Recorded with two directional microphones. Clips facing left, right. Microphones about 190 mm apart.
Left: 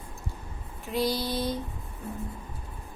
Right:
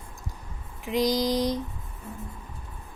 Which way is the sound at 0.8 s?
15° right (ahead or behind).